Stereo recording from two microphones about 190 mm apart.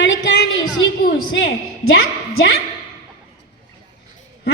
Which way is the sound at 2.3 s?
60° left (ahead or behind).